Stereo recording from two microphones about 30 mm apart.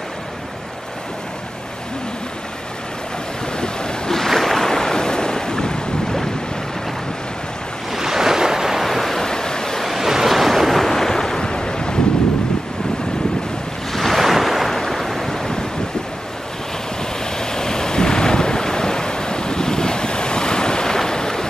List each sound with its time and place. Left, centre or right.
3.5 s waves: left
4.3 s boat: centre; by 5.8 s left
7.9 s waves: centre
8.8 s waves: centre
9.2 s waves: left
9.8 s waves: centre; by 12.0 s left
13.9 s waves: centre
14.7 s waves: centre
15.2 s waves: centre
17.4 s ocean: left